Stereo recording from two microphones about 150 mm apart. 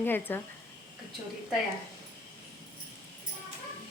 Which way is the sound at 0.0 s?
15° left (ahead or behind).